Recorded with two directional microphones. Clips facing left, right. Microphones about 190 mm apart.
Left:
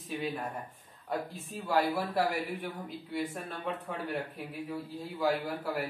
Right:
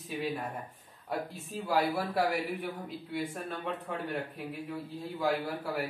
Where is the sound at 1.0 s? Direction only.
Centre (ahead or behind).